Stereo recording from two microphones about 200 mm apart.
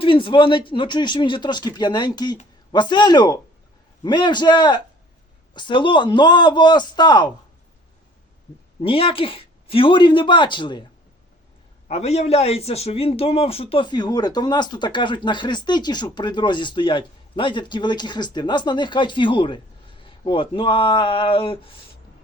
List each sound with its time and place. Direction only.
0.0 s a man's voice: 25° left (ahead or behind)
8.8 s a man's voice: 25° left (ahead or behind)
11.9 s a man's voice: 35° left (ahead or behind)